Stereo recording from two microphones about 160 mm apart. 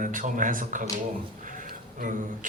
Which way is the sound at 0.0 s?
55° right (ahead or behind).